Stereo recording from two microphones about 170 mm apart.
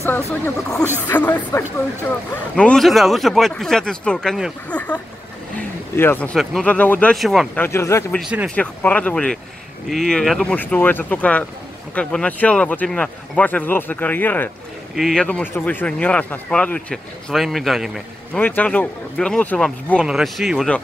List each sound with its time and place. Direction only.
1.1 s speech: 10° left (ahead or behind)
7.6 s speech: 15° left (ahead or behind)
8.2 s speech: 5° right (ahead or behind)
8.5 s speech: 10° left (ahead or behind)
18.4 s speech: 10° left (ahead or behind)